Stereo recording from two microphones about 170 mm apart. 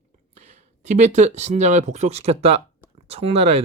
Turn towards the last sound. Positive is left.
turn(degrees=-40)  # may be behind; listen again after turning